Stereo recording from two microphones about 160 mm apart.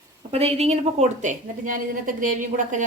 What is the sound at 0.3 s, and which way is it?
A woman's voice, 40° right (ahead or behind).